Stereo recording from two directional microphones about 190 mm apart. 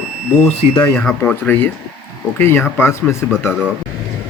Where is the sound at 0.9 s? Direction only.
10° left (ahead or behind).